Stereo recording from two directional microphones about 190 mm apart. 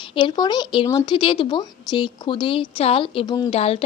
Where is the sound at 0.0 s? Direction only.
25° left (ahead or behind).